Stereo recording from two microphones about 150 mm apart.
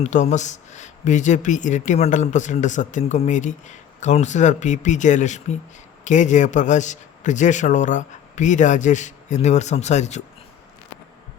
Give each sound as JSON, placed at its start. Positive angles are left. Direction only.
{"t": 0.0, "sound": "speech", "side_deg": 50}